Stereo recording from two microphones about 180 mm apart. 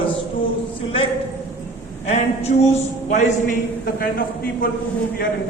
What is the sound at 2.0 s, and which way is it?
A man's voice, 35° left (ahead or behind).